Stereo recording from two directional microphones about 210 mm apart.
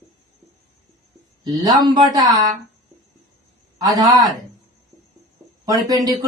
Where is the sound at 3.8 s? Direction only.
15° right (ahead or behind).